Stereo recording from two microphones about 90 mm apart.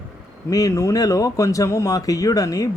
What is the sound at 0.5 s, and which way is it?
Speech, 40° left (ahead or behind).